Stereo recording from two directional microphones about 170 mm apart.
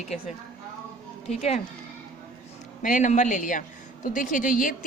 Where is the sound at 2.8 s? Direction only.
50° left (ahead or behind).